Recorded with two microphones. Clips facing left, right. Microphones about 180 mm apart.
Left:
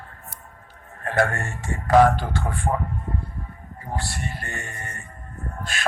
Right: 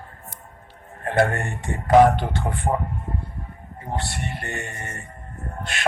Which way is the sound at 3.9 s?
25° right (ahead or behind).